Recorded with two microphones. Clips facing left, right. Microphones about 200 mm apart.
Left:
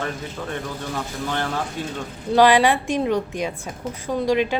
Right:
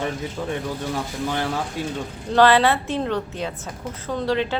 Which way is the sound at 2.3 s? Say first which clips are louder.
Left 1 dB; 10° left (ahead or behind).